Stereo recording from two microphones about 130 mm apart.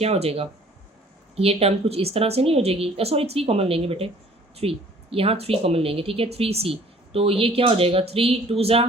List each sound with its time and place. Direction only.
0.0 s speech: 50° right (ahead or behind)